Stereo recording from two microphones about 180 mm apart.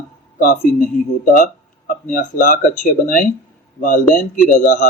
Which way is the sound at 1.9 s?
50° left (ahead or behind).